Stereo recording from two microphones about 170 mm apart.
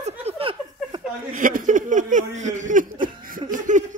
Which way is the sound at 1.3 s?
50° right (ahead or behind).